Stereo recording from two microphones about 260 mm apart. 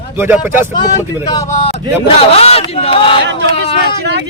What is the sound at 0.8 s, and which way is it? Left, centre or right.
Speech, centre.